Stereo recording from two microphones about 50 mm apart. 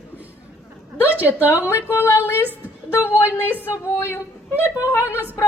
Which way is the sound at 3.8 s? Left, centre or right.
Left.